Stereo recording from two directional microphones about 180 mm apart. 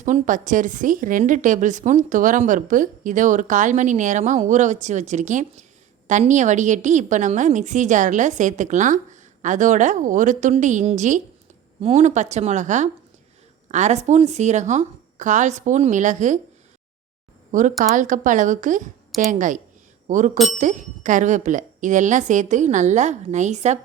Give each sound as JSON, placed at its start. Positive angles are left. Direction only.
{"t": 0.0, "sound": "a woman's voice", "side_deg": -45}
{"t": 17.5, "sound": "a woman's voice", "side_deg": -45}